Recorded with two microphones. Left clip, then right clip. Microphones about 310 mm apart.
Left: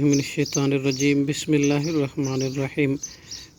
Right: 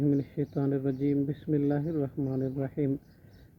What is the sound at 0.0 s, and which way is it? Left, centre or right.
Speech, left.